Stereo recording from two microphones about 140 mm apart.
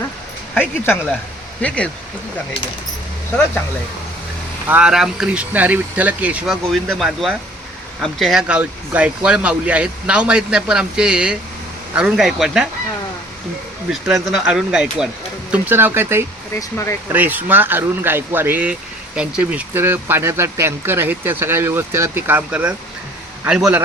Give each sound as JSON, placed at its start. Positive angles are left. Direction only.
{"t": 0.5, "sound": "speech", "side_deg": 10}
{"t": 4.7, "sound": "speech", "side_deg": -5}
{"t": 14.1, "sound": "speech", "side_deg": -5}
{"t": 16.6, "sound": "speech", "side_deg": 20}
{"t": 17.1, "sound": "speech", "side_deg": -15}